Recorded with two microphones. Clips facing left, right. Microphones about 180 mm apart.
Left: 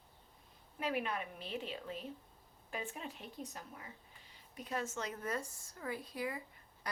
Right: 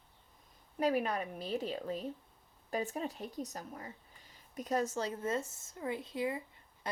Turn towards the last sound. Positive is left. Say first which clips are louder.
# right 5 dB
turn(degrees=-25)  # may be behind; listen again after turning